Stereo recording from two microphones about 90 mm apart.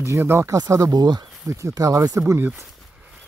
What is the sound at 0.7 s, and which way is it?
A man's voice, 45° right (ahead or behind).